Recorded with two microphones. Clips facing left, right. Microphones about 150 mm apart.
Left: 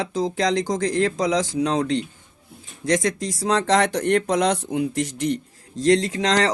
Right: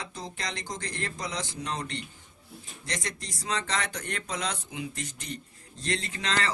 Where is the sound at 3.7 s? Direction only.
70° left (ahead or behind).